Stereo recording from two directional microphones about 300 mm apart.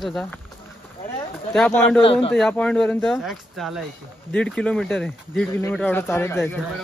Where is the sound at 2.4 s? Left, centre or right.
Centre.